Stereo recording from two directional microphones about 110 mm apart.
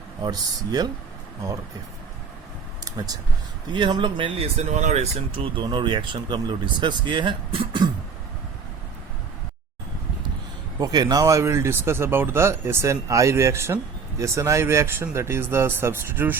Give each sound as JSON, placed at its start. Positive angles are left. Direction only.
{"t": 0.2, "sound": "speech", "side_deg": -35}
{"t": 3.7, "sound": "speech", "side_deg": -45}
{"t": 4.5, "sound": "speech", "side_deg": -90}
{"t": 5.3, "sound": "speech", "side_deg": -55}
{"t": 5.6, "sound": "speech", "side_deg": -45}
{"t": 10.8, "sound": "speech", "side_deg": -35}